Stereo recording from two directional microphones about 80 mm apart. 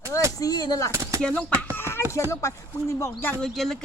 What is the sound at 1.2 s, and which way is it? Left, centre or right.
Speech, centre.